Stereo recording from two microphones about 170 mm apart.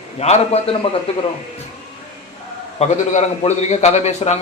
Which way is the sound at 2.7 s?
40° left (ahead or behind).